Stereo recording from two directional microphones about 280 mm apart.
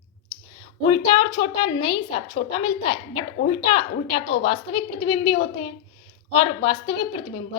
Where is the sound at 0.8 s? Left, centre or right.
Centre.